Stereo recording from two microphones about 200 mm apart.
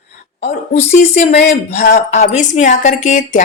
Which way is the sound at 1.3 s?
35° left (ahead or behind).